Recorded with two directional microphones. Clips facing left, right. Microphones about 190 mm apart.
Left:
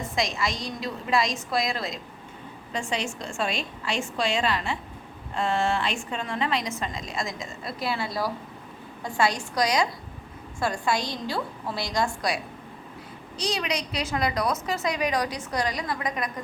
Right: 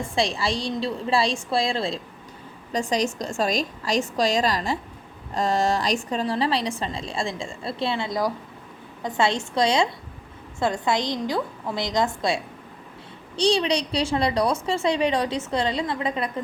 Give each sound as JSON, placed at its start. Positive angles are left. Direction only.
{"t": 0.2, "sound": "a woman's voice", "side_deg": -30}